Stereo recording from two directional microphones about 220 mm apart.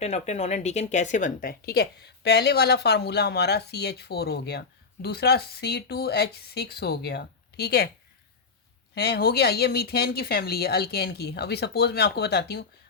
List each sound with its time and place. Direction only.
0.0 s speech: 30° left (ahead or behind); by 7.9 s 45° left (ahead or behind)
9.0 s speech: 50° left (ahead or behind)